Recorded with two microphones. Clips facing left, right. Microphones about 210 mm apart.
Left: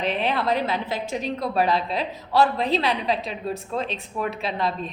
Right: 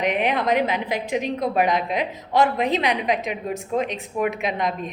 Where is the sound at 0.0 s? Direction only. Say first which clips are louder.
Right 2 dB; 15° right (ahead or behind).